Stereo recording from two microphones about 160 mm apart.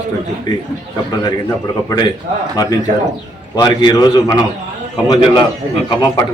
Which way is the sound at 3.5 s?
25° left (ahead or behind).